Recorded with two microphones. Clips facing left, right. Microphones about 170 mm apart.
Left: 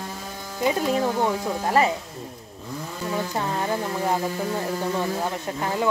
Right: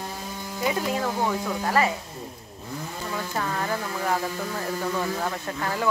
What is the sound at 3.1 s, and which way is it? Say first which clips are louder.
Speech: left 3 dB; 25° left (ahead or behind).